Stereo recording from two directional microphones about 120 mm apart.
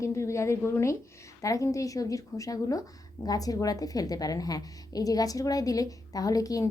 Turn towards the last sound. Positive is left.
turn(degrees=30)  # may be behind; listen again after turning